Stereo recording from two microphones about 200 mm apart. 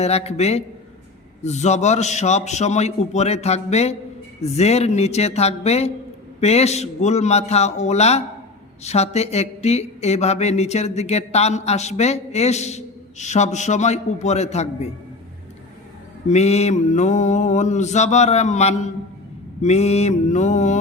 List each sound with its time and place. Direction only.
0.0 s speech: 30° left (ahead or behind)
16.3 s speech: 35° left (ahead or behind)